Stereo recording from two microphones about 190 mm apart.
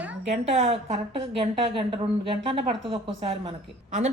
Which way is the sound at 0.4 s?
35° right (ahead or behind).